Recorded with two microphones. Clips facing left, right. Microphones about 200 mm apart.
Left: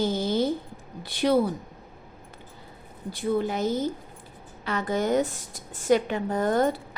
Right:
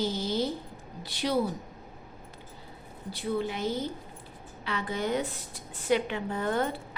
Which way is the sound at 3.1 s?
45° left (ahead or behind).